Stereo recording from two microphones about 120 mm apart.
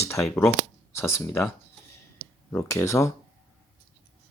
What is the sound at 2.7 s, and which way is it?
Speech, 25° left (ahead or behind).